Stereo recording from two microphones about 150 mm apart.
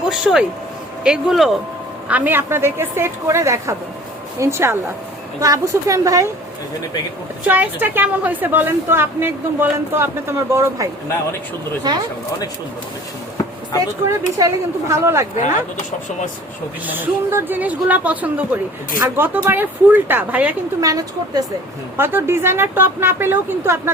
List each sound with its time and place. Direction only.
0.1 s a woman's voice: 5° right (ahead or behind); by 6.3 s 20° right (ahead or behind)
7.4 s a woman's voice: 10° right (ahead or behind)
11.9 s speech: 25° right (ahead or behind)
14.1 s speech: 20° right (ahead or behind)
16.8 s a woman's voice: 10° right (ahead or behind)
20.8 s a woman's voice: 25° right (ahead or behind)